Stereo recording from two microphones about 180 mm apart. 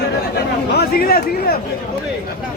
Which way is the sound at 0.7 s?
55° left (ahead or behind).